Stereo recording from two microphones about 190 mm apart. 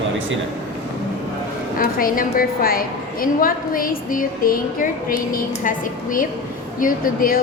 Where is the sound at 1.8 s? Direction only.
50° left (ahead or behind).